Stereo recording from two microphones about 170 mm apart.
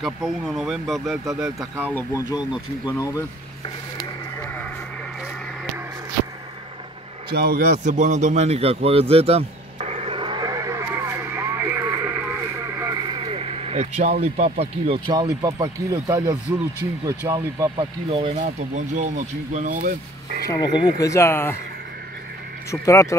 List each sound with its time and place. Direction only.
0.0 s speech: centre (ahead or behind)
2.0 s speech: 20° left (ahead or behind)
7.2 s a man's voice: 65° right (ahead or behind)
7.7 s a sound: 45° right (ahead or behind)
14.2 s speech: 40° right (ahead or behind); by 17.7 s 20° right (ahead or behind)
17.7 s speech: 35° right (ahead or behind)
18.4 s speech: 45° right (ahead or behind)
20.4 s speech: 20° left (ahead or behind)
22.7 s speech: 15° left (ahead or behind)